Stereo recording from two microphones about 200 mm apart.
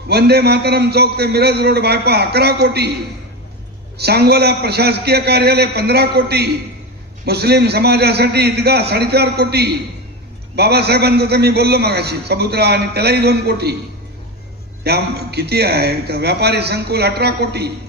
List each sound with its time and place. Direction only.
0.1 s a man's voice: 55° right (ahead or behind)
3.9 s a man's voice: 55° right (ahead or behind)
14.8 s a man's voice: 55° right (ahead or behind)